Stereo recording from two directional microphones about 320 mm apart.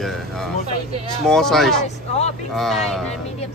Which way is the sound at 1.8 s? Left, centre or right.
Left.